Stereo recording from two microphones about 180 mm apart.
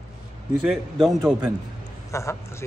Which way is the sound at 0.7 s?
Centre (ahead or behind).